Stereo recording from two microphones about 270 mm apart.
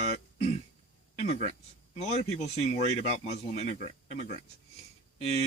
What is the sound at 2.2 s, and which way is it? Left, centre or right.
Speech, left.